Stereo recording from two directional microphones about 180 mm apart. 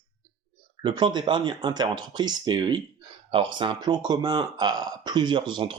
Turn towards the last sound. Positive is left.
turn(degrees=-25)  # may be behind; listen again after turning